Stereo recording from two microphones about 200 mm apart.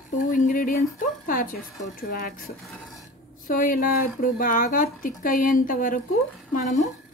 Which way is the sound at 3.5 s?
45° left (ahead or behind).